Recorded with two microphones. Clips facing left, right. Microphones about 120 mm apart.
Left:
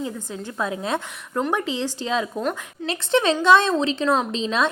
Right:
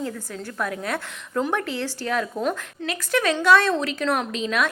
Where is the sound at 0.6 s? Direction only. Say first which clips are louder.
Left 2 dB; 20° left (ahead or behind).